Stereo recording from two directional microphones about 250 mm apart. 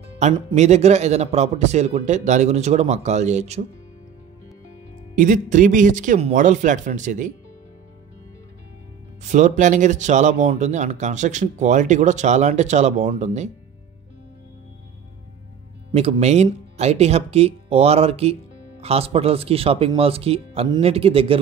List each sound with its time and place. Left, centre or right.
0.2 s speech: right
5.1 s speech: right
9.2 s speech: right
15.9 s speech: right